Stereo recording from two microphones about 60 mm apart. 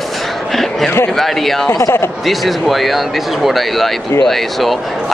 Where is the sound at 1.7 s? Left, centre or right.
Left.